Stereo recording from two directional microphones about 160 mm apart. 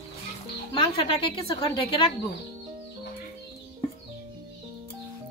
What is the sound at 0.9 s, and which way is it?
Speech, 35° left (ahead or behind).